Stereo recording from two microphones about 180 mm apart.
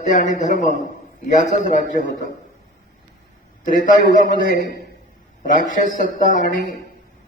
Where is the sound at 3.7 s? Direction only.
50° left (ahead or behind).